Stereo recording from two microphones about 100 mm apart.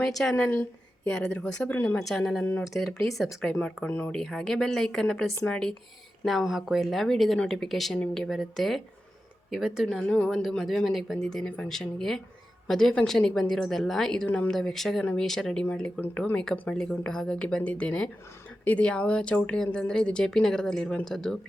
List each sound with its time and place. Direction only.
0.0 s speech: 5° left (ahead or behind)
0.3 s a woman's voice: 15° left (ahead or behind)
2.0 s speech: 5° left (ahead or behind)
2.4 s speech: 20° left (ahead or behind)
2.6 s speech: centre (ahead or behind)
15.6 s speech: 15° left (ahead or behind)